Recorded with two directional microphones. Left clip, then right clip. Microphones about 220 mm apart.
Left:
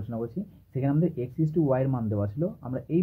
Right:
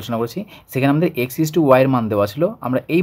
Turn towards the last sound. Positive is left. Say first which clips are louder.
# right 11 dB
turn(degrees=-35)  # may be behind; listen again after turning